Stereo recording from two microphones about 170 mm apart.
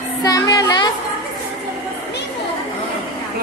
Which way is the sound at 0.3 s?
20° left (ahead or behind).